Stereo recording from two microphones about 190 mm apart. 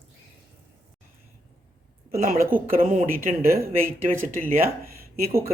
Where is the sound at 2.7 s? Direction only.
45° right (ahead or behind).